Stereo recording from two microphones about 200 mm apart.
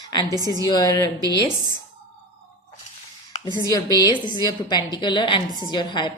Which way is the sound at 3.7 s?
20° left (ahead or behind).